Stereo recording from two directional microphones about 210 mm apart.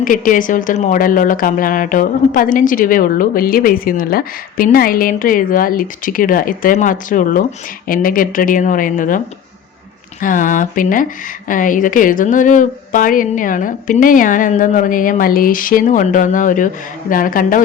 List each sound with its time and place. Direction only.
0.0 s speech: 40° left (ahead or behind)